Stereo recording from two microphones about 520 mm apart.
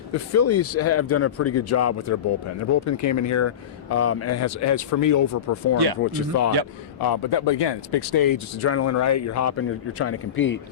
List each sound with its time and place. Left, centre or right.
0.1 s speech: left
7.0 s speech: left
8.6 s speech: left